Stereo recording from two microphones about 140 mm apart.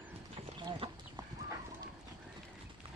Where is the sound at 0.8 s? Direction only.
40° right (ahead or behind).